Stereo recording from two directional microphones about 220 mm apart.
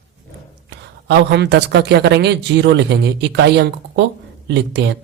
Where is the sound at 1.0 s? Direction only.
50° right (ahead or behind).